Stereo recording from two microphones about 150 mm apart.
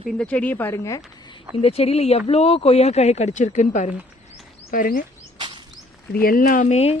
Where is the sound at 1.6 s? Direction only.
40° left (ahead or behind).